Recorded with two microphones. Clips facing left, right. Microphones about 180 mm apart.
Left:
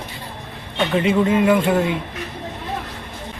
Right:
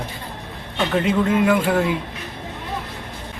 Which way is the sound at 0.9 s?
5° left (ahead or behind).